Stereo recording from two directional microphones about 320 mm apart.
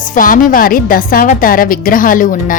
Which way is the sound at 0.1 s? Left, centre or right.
Left.